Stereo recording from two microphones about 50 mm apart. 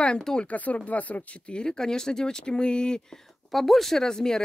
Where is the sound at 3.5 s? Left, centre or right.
Centre.